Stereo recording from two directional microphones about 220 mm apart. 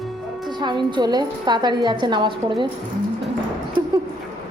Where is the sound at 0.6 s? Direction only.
20° right (ahead or behind).